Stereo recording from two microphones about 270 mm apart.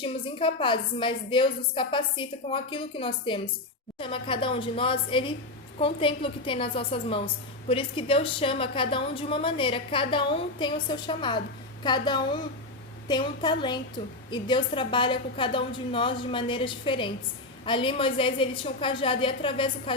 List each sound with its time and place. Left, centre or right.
0.0 s a woman's voice: centre